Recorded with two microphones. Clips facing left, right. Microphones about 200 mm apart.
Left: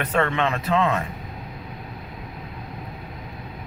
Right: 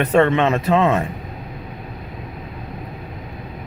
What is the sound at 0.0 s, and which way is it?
Speech, 25° right (ahead or behind).